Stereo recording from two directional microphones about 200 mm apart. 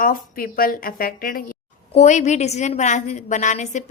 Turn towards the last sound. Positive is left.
turn(degrees=35)  # may be behind; listen again after turning